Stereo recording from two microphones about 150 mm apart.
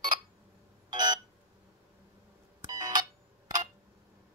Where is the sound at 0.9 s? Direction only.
30° right (ahead or behind).